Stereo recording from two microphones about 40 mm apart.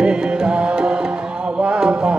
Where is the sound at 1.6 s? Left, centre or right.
Right.